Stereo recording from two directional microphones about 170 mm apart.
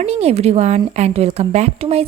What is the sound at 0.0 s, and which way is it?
A woman's voice, 40° right (ahead or behind).